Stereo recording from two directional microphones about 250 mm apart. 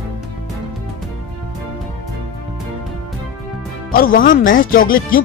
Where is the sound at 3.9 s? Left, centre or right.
Left.